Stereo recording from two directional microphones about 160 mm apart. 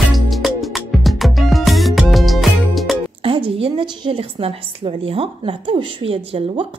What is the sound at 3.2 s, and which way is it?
A woman's voice, 35° right (ahead or behind).